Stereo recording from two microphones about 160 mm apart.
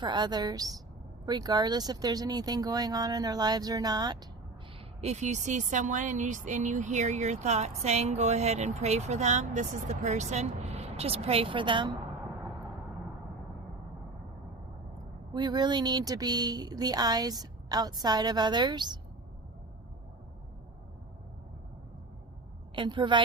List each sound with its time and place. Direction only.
0.0 s speech: 30° right (ahead or behind)
4.9 s speech: 45° right (ahead or behind)
15.3 s speech: 30° right (ahead or behind)
22.7 s speech: 30° right (ahead or behind)